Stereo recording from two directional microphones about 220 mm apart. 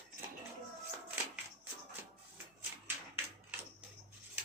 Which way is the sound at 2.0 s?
10° right (ahead or behind).